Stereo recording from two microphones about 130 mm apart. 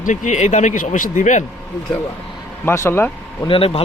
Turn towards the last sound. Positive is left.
turn(degrees=45)  # may be behind; listen again after turning